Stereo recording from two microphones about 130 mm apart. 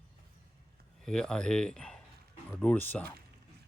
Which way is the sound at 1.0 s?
5° left (ahead or behind).